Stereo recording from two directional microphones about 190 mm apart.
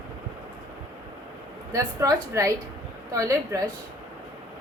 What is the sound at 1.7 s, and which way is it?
A woman's voice, 15° right (ahead or behind).